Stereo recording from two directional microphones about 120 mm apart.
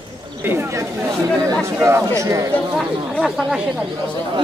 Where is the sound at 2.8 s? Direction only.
Centre (ahead or behind).